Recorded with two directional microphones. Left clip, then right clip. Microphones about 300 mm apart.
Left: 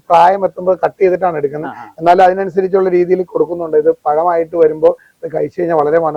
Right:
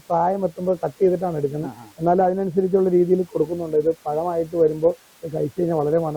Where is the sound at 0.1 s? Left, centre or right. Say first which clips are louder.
Left 12 dB; centre.